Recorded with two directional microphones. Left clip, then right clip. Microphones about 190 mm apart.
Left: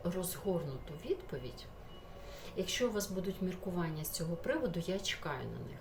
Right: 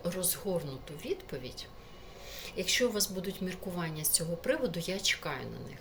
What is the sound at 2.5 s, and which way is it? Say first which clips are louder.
A woman's voice: right 5 dB; 10° left (ahead or behind).